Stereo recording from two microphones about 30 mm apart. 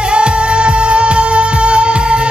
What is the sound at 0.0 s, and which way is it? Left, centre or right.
Music, right.